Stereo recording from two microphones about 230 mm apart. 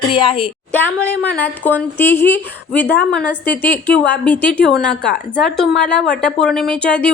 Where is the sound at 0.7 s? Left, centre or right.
Centre.